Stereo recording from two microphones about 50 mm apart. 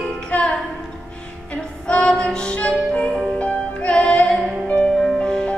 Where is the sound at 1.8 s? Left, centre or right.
Left.